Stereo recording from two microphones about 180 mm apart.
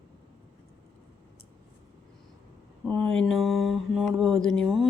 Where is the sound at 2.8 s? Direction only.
5° left (ahead or behind).